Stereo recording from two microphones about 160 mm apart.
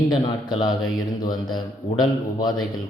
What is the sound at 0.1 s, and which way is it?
Speech, 25° left (ahead or behind).